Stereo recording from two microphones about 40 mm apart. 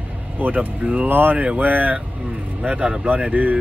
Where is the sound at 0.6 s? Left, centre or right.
Right.